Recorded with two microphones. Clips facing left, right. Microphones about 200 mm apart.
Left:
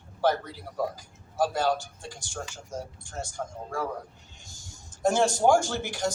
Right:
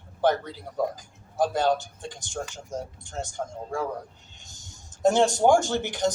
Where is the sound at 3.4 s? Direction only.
5° right (ahead or behind).